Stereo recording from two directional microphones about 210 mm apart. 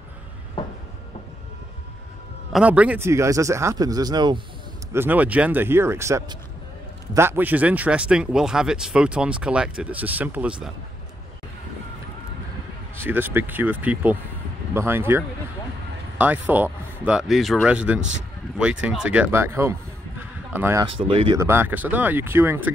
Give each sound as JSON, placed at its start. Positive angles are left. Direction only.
{"t": 0.6, "sound": "a sound", "side_deg": 25}
{"t": 2.5, "sound": "speech", "side_deg": -5}
{"t": 4.9, "sound": "speech", "side_deg": -10}
{"t": 12.9, "sound": "speech", "side_deg": -10}
{"t": 21.1, "sound": "speech", "side_deg": -25}
{"t": 21.4, "sound": "speech", "side_deg": -10}